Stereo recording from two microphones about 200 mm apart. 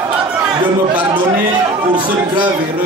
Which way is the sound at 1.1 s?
25° right (ahead or behind).